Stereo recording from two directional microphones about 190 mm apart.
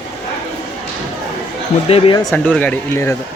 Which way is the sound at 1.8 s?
30° left (ahead or behind).